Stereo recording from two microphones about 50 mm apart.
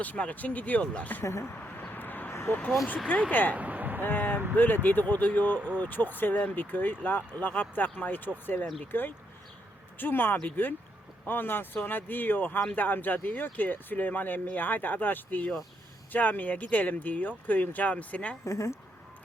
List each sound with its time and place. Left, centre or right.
0.0 s speech: left
1.2 s speech: left
1.6 s a sound: left
2.5 s speech: left
3.5 s a sound: right
4.0 s speech: left
18.4 s speech: left